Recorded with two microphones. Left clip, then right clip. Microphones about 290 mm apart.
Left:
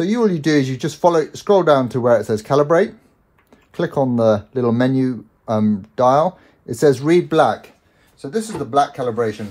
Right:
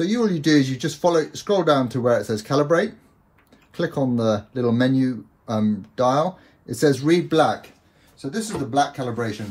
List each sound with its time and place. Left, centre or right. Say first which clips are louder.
0.0 s speech: left 4 dB; left